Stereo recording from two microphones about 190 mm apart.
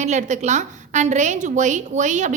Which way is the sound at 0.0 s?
40° right (ahead or behind).